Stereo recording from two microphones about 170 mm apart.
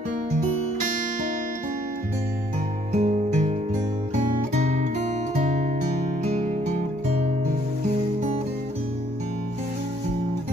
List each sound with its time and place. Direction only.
2.9 s music: 40° right (ahead or behind)